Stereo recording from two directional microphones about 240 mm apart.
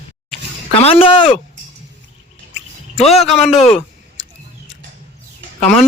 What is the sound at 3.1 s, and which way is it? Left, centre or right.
Speech, centre.